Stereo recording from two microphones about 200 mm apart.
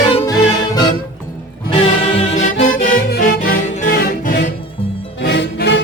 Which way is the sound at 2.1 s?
30° left (ahead or behind).